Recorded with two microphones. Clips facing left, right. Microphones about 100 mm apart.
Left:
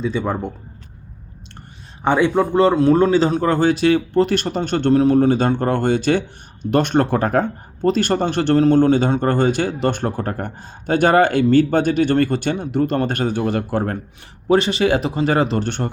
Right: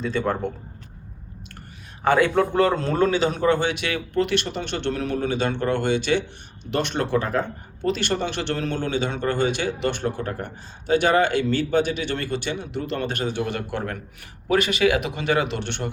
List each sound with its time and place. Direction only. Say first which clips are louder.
0.0 s a man's voice: left 2 dB; 5° left (ahead or behind)
2.1 s a man's voice: left 4 dB; 15° left (ahead or behind)
3.1 s speech: left 4 dB; 35° left (ahead or behind)